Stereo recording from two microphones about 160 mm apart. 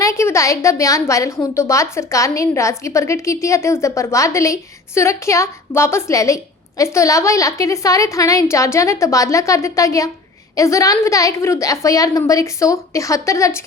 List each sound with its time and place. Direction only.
0.0 s a woman's voice: 15° left (ahead or behind)